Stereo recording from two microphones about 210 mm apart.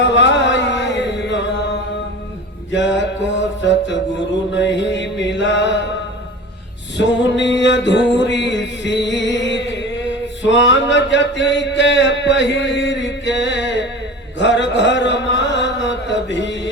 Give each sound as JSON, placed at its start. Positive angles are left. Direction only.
{"t": 0.0, "sound": "music", "side_deg": 60}
{"t": 2.7, "sound": "music", "side_deg": 60}
{"t": 4.5, "sound": "mantra", "side_deg": 60}
{"t": 6.9, "sound": "music", "side_deg": 60}
{"t": 10.4, "sound": "a sound", "side_deg": 60}
{"t": 14.3, "sound": "chant", "side_deg": 60}